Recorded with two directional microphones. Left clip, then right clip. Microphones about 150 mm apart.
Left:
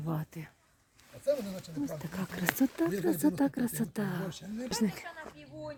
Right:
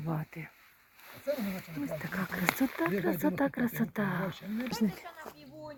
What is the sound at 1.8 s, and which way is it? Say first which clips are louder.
Speech: right 3 dB; 20° left (ahead or behind).